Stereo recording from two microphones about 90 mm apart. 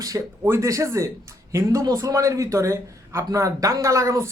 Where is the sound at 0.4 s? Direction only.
35° right (ahead or behind).